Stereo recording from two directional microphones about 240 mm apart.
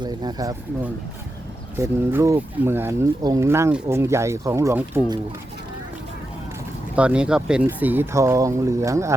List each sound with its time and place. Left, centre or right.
0.0 s speech: centre
1.8 s speech: centre
6.9 s speech: centre